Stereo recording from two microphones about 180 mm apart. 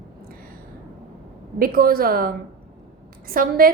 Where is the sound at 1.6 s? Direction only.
55° right (ahead or behind).